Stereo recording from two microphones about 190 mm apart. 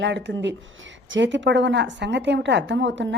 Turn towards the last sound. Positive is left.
turn(degrees=-70)  # may be behind; listen again after turning